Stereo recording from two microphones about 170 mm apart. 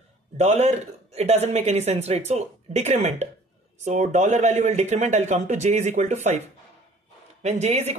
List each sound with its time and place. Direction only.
0.4 s speech: 40° right (ahead or behind)
7.4 s speech: 40° right (ahead or behind)